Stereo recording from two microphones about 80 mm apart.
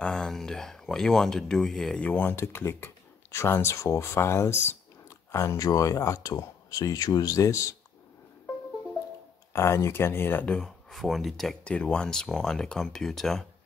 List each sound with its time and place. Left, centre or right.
0.0 s speech: centre
2.0 s speech: left
5.6 s speech: left
9.5 s speech: left
10.5 s speech: centre
11.6 s speech: centre